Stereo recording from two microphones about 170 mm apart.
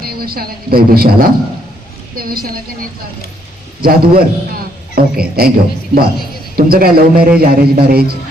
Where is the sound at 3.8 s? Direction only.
60° right (ahead or behind).